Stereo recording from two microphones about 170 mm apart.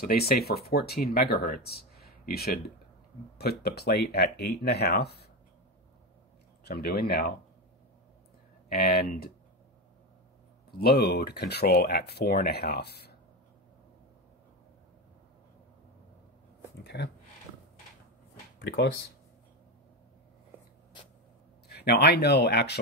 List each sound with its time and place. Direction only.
0.0 s speech: 65° left (ahead or behind)
6.6 s speech: 65° left (ahead or behind)
8.6 s speech: 65° left (ahead or behind)
10.8 s speech: 70° left (ahead or behind)
16.8 s speech: 90° left
18.6 s speech: 75° left (ahead or behind)
21.6 s speech: 75° left (ahead or behind)